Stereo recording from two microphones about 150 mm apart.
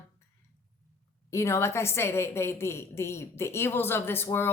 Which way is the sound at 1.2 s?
20° left (ahead or behind).